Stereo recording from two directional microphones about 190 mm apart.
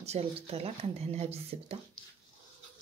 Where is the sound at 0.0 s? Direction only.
35° right (ahead or behind).